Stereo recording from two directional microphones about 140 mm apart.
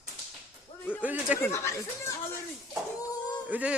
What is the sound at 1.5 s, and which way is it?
Speech, 20° left (ahead or behind).